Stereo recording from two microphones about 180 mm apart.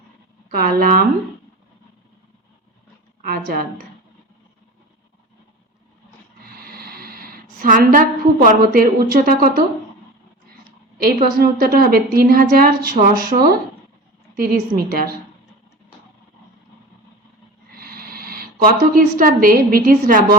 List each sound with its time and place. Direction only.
0.5 s a woman's voice: 55° right (ahead or behind)
3.2 s a woman's voice: 55° right (ahead or behind)
6.4 s speech: 60° right (ahead or behind)
10.9 s a woman's voice: 55° right (ahead or behind)
17.7 s speech: 55° right (ahead or behind)